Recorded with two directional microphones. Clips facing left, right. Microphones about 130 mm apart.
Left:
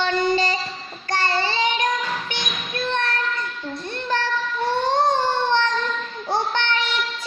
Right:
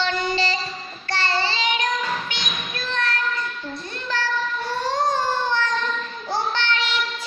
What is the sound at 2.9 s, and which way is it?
Child singing, 25° left (ahead or behind).